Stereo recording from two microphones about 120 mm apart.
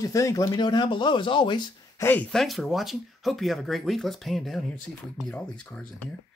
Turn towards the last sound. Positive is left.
turn(degrees=10)  # may be behind; listen again after turning